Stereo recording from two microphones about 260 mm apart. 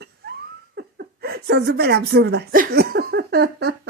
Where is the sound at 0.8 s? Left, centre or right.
Right.